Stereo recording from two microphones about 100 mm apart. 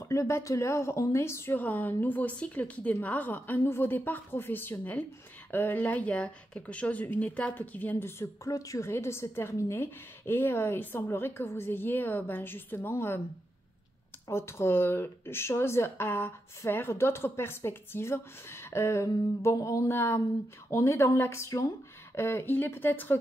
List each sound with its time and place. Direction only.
0.0 s speech: 30° left (ahead or behind)
14.3 s speech: 25° left (ahead or behind)